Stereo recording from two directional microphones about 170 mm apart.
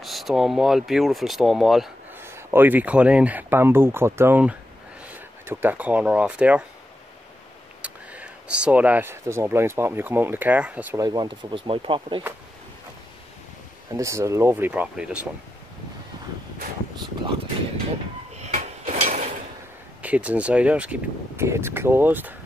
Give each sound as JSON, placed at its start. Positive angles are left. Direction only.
{"t": 0.0, "sound": "speech", "side_deg": 0}
{"t": 2.1, "sound": "speech", "side_deg": -15}
{"t": 7.8, "sound": "speech", "side_deg": -10}
{"t": 11.0, "sound": "speech", "side_deg": -25}
{"t": 13.9, "sound": "speech", "side_deg": -20}
{"t": 18.3, "sound": "a sound", "side_deg": -40}
{"t": 20.0, "sound": "speech", "side_deg": -10}